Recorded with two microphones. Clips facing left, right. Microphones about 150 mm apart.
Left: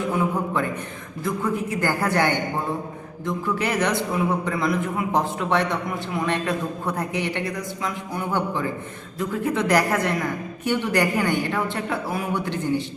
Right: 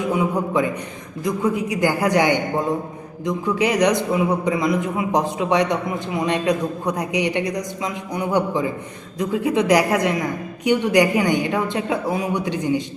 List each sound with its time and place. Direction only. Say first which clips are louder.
0.0 s a man's voice: right 3 dB; 15° right (ahead or behind)